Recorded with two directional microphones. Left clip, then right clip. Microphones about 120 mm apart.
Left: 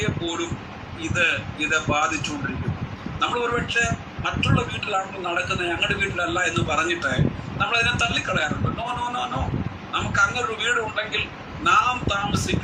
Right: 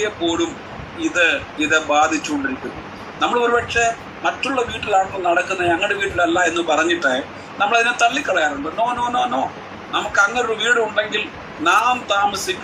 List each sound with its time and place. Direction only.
0.0 s a man's voice: 20° left (ahead or behind)